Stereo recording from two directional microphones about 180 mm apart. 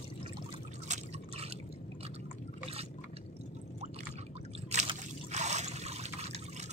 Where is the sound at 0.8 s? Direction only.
40° right (ahead or behind).